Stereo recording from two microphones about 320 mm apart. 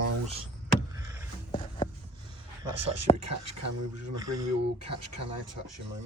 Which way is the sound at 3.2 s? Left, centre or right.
Right.